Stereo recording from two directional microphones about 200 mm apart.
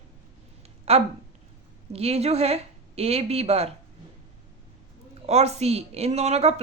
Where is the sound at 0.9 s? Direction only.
30° right (ahead or behind).